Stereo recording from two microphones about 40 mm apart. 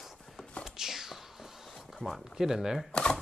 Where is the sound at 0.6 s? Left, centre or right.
Centre.